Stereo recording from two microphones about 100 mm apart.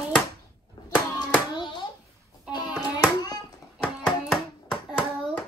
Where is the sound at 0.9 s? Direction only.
50° left (ahead or behind).